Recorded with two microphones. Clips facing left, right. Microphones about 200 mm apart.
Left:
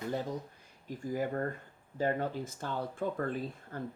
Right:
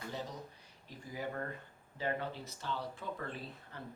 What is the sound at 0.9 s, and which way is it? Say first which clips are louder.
Speech: left 8 dB; 45° left (ahead or behind).